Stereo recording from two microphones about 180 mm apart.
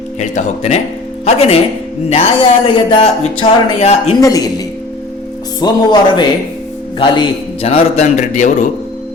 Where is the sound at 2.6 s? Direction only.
30° left (ahead or behind).